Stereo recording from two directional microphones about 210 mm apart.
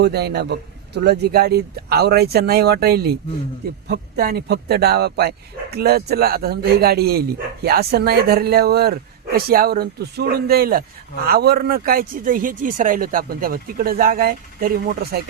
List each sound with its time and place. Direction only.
0.0 s speech: 50° right (ahead or behind)